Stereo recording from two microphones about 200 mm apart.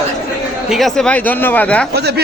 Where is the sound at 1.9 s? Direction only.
55° right (ahead or behind).